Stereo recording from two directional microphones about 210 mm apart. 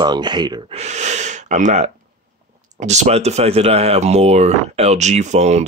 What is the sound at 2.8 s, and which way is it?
Speech, 35° right (ahead or behind).